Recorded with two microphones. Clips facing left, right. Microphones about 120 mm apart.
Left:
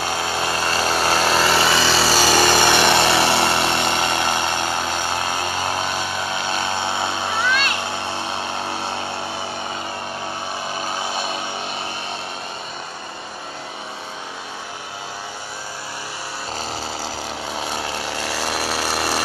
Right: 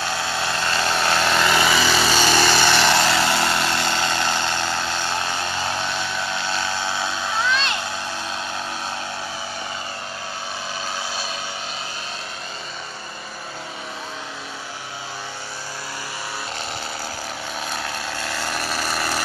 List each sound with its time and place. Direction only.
0.0 s vehicle: 15° left (ahead or behind)
8.0 s music: 65° left (ahead or behind)
8.3 s a sound: 25° left (ahead or behind)
11.0 s a sound: 20° left (ahead or behind)
17.6 s vehicle: 20° left (ahead or behind)
18.5 s chainsaw: 10° left (ahead or behind)